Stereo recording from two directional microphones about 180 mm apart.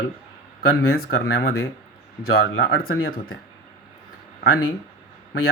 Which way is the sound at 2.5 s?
90° left.